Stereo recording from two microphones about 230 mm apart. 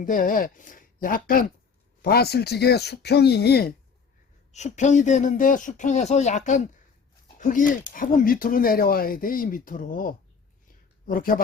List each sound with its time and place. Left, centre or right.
0.0 s speech: left
4.5 s speech: left